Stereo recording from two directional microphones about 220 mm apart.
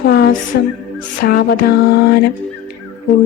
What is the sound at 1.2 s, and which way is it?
Speech, 45° left (ahead or behind).